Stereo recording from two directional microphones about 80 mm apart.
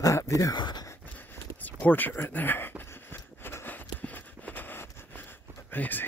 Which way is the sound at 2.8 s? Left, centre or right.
Left.